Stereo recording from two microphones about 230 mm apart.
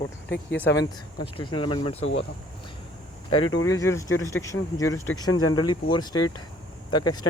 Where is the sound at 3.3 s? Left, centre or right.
Left.